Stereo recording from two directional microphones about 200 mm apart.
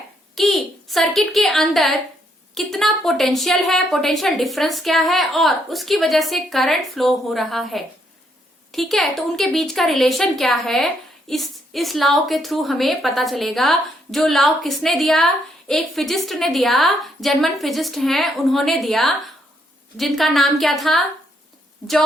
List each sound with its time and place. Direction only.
0.3 s a woman's voice: centre (ahead or behind)